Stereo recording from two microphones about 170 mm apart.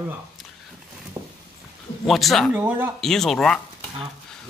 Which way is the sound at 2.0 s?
Centre (ahead or behind).